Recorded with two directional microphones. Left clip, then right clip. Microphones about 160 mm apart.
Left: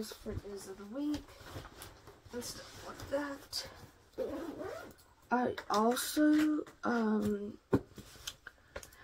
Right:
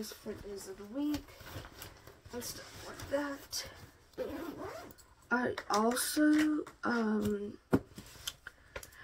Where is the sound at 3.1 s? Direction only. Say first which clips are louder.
Right 1 dB; 10° right (ahead or behind).